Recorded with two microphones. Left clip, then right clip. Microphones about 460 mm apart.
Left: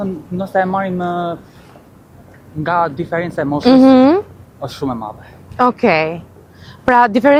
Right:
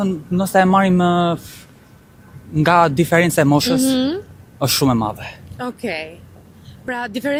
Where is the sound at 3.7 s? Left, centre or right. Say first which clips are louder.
Left 10 dB; left.